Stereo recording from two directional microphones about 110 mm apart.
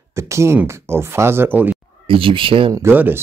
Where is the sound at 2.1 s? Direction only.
55° right (ahead or behind).